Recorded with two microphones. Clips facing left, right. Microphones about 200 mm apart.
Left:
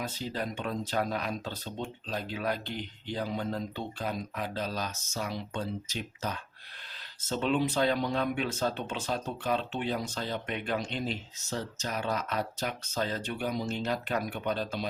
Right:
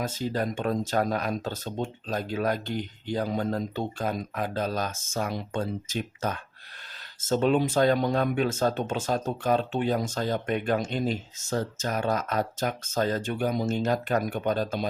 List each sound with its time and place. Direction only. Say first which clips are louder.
0.0 s speech: right 6 dB; 45° right (ahead or behind)